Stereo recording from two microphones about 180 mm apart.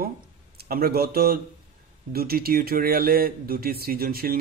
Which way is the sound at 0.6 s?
55° right (ahead or behind).